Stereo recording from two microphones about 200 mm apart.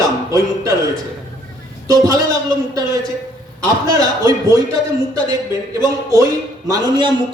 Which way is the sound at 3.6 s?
15° right (ahead or behind).